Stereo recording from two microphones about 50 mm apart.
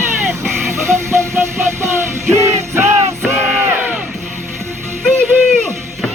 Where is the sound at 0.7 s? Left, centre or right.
Right.